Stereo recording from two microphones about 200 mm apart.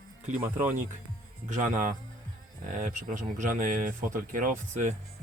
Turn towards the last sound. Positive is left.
turn(degrees=-40)  # may be behind; listen again after turning